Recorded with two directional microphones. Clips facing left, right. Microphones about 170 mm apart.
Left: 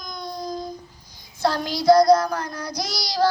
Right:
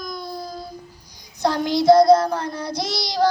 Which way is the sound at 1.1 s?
20° right (ahead or behind).